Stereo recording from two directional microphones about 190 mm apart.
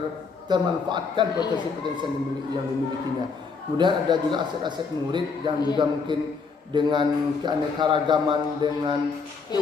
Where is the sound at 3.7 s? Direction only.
25° right (ahead or behind).